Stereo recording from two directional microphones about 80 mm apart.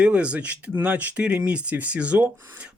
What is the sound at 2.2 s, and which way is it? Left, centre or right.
Speech, right.